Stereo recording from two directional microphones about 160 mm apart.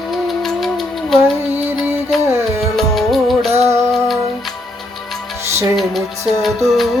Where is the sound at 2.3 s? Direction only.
15° right (ahead or behind).